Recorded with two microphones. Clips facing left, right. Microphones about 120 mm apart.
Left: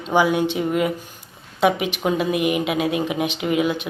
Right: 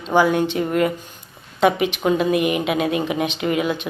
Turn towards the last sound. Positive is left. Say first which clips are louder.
# even
turn(degrees=10)  # may be behind; listen again after turning